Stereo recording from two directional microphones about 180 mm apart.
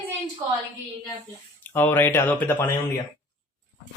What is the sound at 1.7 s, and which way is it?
Speech, 10° left (ahead or behind).